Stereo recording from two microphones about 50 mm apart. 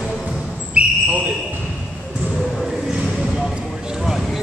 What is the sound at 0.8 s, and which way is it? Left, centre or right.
Basketball bounce, right.